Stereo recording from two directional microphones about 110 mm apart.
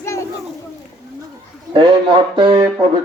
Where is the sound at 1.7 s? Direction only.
45° right (ahead or behind).